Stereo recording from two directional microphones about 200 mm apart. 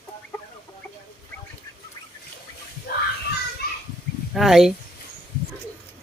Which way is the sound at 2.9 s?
50° left (ahead or behind).